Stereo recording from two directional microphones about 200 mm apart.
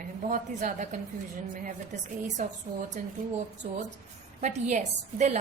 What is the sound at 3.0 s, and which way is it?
Speech, 45° right (ahead or behind).